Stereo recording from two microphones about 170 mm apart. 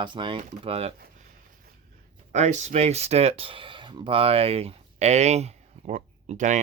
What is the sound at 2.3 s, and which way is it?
Speech, 45° right (ahead or behind).